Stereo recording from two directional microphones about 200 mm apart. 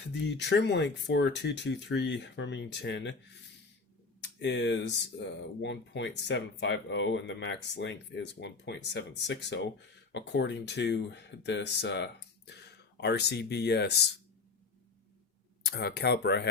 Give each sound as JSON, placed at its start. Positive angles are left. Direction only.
{"t": 0.1, "sound": "speech", "side_deg": 60}
{"t": 4.4, "sound": "speech", "side_deg": 60}
{"t": 15.6, "sound": "speech", "side_deg": 55}